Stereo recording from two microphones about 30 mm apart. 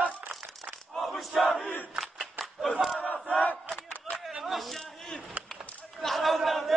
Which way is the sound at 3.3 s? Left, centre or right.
Left.